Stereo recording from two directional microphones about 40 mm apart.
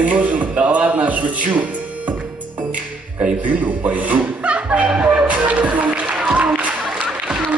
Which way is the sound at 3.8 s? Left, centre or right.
Right.